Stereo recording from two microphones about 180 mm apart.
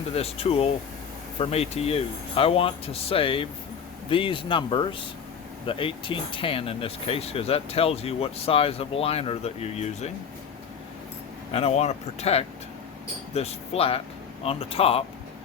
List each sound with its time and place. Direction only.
0.1 s speech: 35° left (ahead or behind)
11.5 s speech: 35° left (ahead or behind)